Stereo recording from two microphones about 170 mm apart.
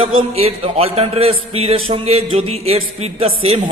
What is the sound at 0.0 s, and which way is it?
A man's voice, 35° right (ahead or behind).